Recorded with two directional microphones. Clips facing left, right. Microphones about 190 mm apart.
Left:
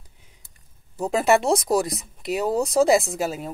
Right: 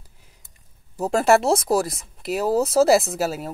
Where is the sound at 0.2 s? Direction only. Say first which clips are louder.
Even; centre (ahead or behind).